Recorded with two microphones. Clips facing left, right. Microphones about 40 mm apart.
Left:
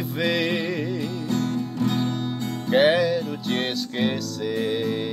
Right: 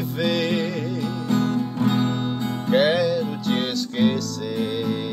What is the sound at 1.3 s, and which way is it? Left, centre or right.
Music, centre.